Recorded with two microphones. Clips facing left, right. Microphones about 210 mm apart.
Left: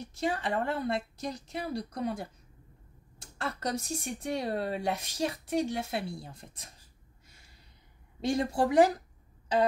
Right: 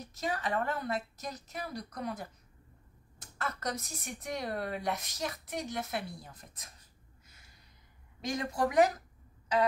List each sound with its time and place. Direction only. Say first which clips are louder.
0.0 s speech: left 4 dB; 30° left (ahead or behind)
8.2 s speech: left 4 dB; 30° left (ahead or behind)